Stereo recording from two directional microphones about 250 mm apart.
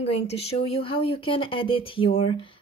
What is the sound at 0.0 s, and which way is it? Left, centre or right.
Speech, left.